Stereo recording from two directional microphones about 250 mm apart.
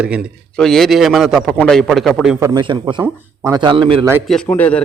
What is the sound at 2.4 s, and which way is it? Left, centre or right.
A man's voice, centre.